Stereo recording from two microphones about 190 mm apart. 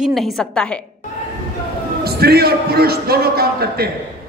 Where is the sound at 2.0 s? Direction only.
55° right (ahead or behind).